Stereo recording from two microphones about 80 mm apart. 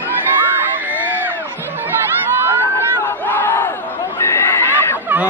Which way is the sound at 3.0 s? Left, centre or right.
Left.